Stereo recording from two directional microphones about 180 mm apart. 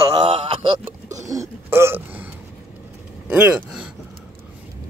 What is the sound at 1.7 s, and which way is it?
Gasp, 15° right (ahead or behind).